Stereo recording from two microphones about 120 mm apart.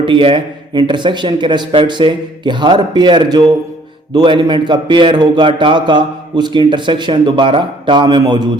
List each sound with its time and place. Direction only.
0.0 s a man's voice: 45° right (ahead or behind)